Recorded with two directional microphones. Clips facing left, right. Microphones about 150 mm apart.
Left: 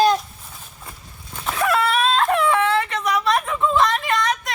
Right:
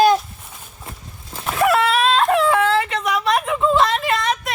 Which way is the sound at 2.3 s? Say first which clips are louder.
Right 2 dB; 30° right (ahead or behind).